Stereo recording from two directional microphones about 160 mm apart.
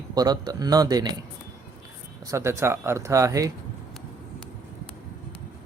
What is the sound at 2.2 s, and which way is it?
Speech, 20° right (ahead or behind).